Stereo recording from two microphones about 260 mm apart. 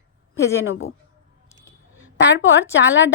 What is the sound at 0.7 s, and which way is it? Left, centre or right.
Speech, left.